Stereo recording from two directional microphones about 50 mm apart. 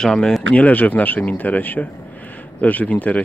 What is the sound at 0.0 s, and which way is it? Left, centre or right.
Speech, centre.